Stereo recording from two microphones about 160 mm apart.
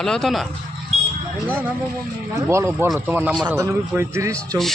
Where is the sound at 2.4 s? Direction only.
15° right (ahead or behind).